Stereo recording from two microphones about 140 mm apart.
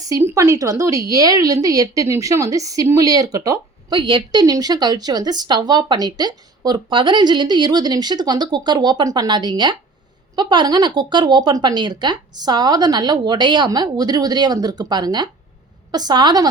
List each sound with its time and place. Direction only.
0.0 s speech: 20° right (ahead or behind)